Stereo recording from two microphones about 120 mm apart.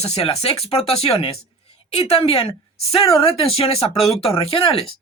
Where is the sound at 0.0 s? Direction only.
55° left (ahead or behind).